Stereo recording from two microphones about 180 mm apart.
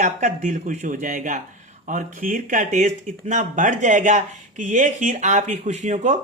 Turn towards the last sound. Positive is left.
turn(degrees=-40)  # may be behind; listen again after turning